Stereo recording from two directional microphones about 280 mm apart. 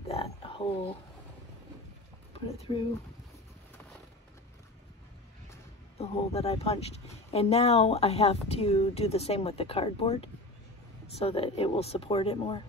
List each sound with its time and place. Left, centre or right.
0.1 s a sound: centre
2.3 s speech: left
5.9 s speech: left